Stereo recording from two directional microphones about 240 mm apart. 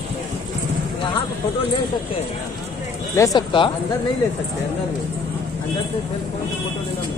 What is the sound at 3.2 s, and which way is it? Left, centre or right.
Speech, centre.